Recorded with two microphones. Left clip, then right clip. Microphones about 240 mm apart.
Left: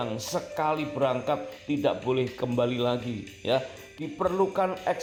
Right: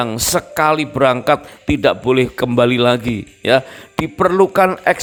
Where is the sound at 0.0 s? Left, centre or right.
Right.